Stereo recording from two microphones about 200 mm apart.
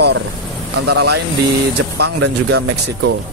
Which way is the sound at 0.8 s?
55° right (ahead or behind).